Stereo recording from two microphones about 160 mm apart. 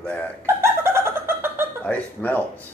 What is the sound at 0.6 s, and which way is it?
Chicken, 15° right (ahead or behind).